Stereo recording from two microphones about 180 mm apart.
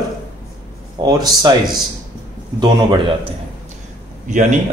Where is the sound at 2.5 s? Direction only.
25° right (ahead or behind).